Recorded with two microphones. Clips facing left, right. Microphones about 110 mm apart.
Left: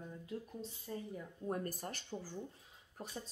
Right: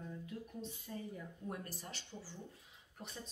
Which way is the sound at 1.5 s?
50° left (ahead or behind).